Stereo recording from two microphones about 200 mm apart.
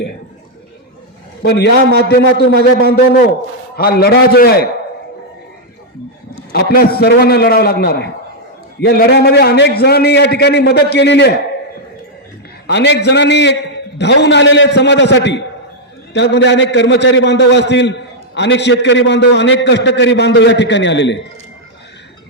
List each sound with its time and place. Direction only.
1.4 s a man's voice: 55° left (ahead or behind)
6.5 s a man's voice: 50° left (ahead or behind)
12.6 s a man's voice: 60° left (ahead or behind)